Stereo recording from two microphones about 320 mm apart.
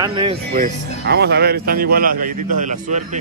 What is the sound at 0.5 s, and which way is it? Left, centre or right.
Speech, right.